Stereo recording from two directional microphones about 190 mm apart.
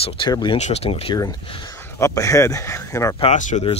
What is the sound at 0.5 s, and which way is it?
Speech, 35° left (ahead or behind).